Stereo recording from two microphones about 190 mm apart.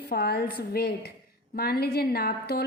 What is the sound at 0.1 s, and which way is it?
A woman's voice, 55° left (ahead or behind).